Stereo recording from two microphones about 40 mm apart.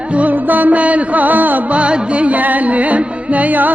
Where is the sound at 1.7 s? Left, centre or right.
Right.